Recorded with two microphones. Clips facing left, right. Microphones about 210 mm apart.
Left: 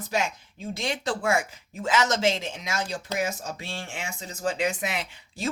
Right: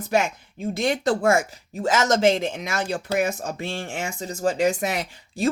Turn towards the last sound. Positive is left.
turn(degrees=-45)  # may be behind; listen again after turning